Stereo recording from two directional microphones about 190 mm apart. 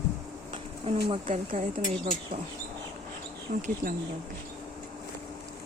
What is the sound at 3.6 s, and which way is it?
Speech, 50° right (ahead or behind).